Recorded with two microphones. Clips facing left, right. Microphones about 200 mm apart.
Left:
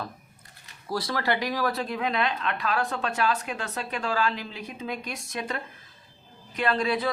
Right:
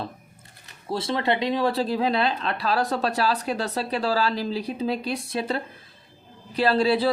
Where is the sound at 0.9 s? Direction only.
25° right (ahead or behind).